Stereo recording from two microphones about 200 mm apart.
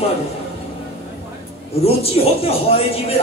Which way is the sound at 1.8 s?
30° left (ahead or behind).